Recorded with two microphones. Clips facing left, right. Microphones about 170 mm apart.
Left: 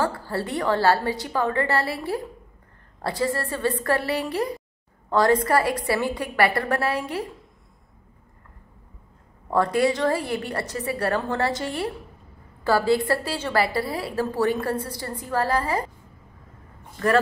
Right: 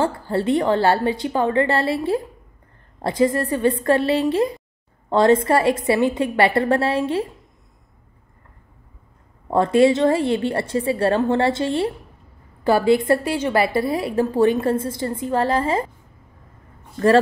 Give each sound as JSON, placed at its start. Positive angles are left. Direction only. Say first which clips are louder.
{"t": 0.0, "sound": "a woman's voice", "louder": "right 5 dB", "side_deg": -20}
{"t": 9.5, "sound": "a woman's voice", "louder": "right 6 dB", "side_deg": -25}